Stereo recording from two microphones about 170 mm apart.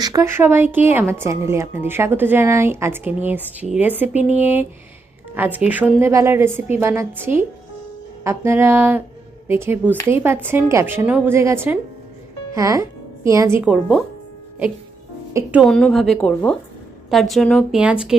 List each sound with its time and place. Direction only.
0.0 s a woman's voice: 20° right (ahead or behind)
15.3 s a woman's voice: 15° right (ahead or behind)
15.6 s a woman's voice: centre (ahead or behind)